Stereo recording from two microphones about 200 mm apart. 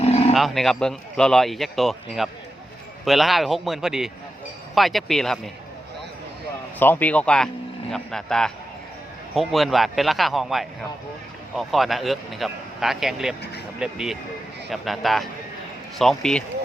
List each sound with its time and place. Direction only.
0.0 s roaring cats: 30° left (ahead or behind)
0.3 s speech: centre (ahead or behind)
6.7 s speech: 10° left (ahead or behind)